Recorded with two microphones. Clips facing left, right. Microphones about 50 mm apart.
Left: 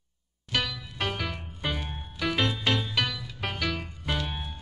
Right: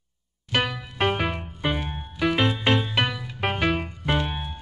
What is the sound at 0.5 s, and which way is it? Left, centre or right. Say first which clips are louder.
Music: right 5 dB; right.